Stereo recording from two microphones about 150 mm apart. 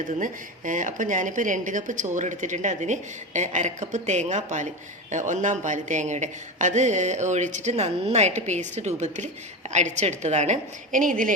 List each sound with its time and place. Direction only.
0.0 s speech: 60° right (ahead or behind)